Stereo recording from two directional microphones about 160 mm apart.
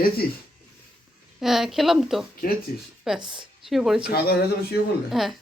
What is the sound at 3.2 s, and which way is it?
Speech, 30° right (ahead or behind).